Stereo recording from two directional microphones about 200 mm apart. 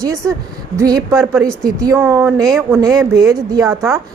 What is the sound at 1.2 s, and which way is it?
Speech, centre (ahead or behind).